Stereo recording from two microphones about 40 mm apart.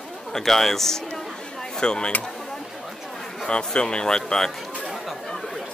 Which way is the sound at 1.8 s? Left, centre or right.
Left.